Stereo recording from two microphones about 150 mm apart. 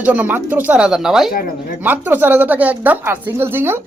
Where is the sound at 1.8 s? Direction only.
10° right (ahead or behind).